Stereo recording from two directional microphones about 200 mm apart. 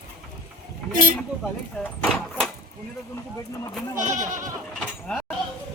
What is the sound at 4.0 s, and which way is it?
Goat, 40° right (ahead or behind).